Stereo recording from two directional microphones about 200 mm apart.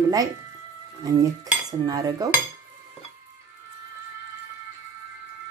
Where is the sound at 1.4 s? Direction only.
20° right (ahead or behind).